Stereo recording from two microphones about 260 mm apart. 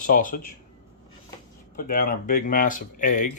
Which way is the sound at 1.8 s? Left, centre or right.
Left.